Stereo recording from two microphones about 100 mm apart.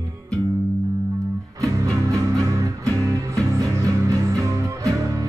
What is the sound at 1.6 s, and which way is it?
Music, 30° right (ahead or behind).